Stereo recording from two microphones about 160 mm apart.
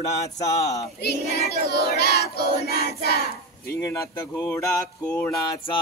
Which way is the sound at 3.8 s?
20° left (ahead or behind).